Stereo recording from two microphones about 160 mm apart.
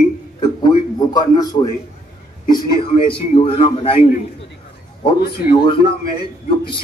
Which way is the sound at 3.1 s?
35° left (ahead or behind).